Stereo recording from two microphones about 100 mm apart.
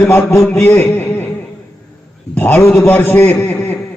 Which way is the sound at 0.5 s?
20° left (ahead or behind).